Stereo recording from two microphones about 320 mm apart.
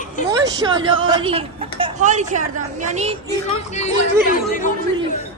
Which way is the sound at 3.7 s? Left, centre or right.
Left.